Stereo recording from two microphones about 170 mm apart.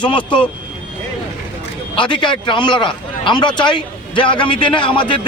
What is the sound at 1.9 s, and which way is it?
A man's voice, 30° left (ahead or behind).